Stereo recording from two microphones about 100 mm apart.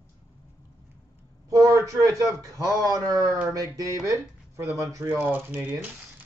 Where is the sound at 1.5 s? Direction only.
35° right (ahead or behind).